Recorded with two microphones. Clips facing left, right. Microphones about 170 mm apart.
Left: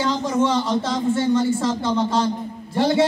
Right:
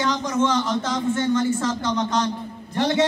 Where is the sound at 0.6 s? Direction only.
25° left (ahead or behind).